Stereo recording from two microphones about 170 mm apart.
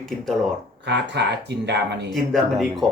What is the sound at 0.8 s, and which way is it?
Speech, 90° right.